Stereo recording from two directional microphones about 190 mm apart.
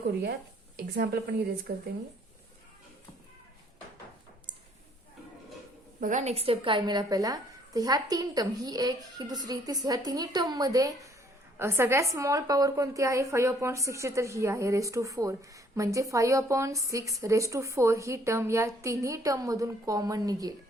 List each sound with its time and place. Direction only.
0.0 s a woman's voice: 60° right (ahead or behind)
4.5 s a sound: 25° right (ahead or behind)
6.0 s a woman's voice: 40° right (ahead or behind); by 20.5 s 20° right (ahead or behind)